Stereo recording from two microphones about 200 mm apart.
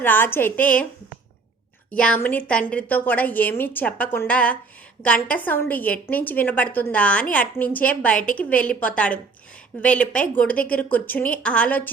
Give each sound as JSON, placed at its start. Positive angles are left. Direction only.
{"t": 0.0, "sound": "a woman's voice", "side_deg": 10}
{"t": 1.9, "sound": "a woman's voice", "side_deg": 5}